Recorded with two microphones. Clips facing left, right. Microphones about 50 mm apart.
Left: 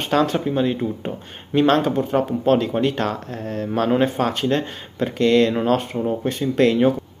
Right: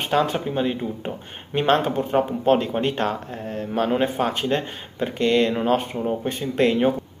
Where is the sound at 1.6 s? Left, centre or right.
Right.